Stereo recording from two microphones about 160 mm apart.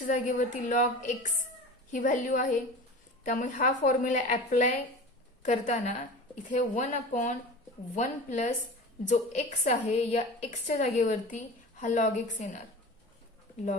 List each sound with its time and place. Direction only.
0.1 s a woman's voice: 50° left (ahead or behind)